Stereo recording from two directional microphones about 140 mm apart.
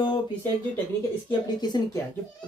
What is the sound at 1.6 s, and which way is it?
Speech, 30° left (ahead or behind).